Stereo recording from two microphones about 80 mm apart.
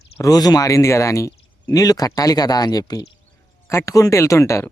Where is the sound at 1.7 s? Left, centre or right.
Left.